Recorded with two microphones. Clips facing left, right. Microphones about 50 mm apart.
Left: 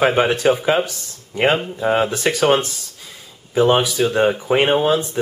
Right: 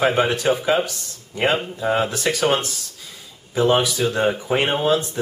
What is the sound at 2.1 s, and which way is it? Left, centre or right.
Speech, centre.